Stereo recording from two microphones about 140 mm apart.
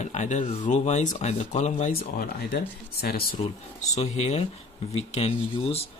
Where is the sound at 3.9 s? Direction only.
50° left (ahead or behind).